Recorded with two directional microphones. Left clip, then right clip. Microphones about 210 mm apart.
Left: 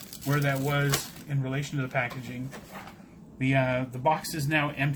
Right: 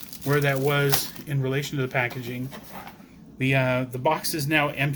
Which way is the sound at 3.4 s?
45° right (ahead or behind).